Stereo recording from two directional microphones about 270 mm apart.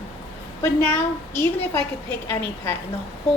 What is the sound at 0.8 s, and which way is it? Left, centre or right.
A woman's voice, centre.